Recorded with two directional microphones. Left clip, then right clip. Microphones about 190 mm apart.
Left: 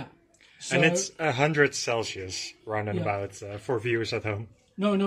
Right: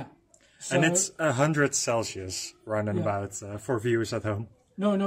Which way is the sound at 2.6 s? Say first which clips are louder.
Right 1 dB; 60° right (ahead or behind).